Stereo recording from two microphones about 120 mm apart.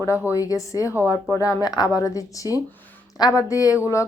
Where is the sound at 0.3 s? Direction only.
30° left (ahead or behind).